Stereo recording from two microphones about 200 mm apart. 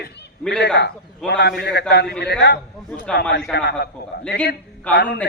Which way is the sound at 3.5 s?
55° left (ahead or behind).